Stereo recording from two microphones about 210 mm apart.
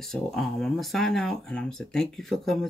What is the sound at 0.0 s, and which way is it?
Speech, centre (ahead or behind).